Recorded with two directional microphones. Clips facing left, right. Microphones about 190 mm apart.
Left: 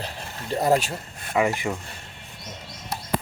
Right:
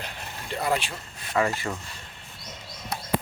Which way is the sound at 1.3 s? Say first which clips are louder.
Left 3 dB; 15° left (ahead or behind).